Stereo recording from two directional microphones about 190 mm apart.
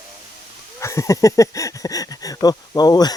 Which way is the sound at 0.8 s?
15° left (ahead or behind).